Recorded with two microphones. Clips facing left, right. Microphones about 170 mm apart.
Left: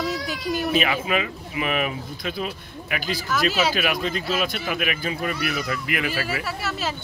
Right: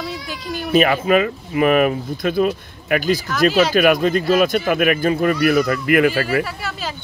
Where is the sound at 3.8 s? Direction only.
50° right (ahead or behind).